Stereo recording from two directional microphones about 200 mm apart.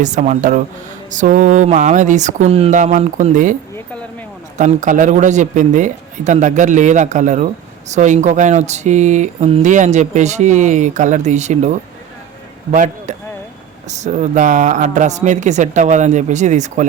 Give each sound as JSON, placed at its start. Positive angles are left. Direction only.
{"t": 0.0, "sound": "speech", "side_deg": -40}